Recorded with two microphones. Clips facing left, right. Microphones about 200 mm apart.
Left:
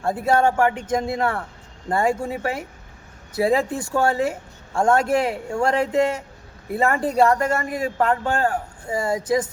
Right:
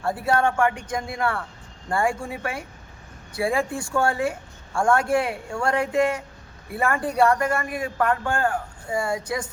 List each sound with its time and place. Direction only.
0.0 s speech: 25° left (ahead or behind)